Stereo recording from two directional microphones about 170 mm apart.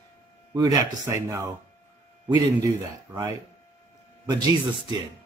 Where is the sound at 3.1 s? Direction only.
15° right (ahead or behind).